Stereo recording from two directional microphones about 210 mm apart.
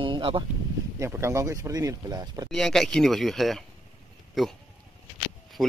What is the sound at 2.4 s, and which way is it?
Speech, centre (ahead or behind).